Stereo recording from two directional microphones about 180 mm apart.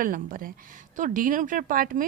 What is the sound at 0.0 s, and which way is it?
A woman's voice, 50° right (ahead or behind).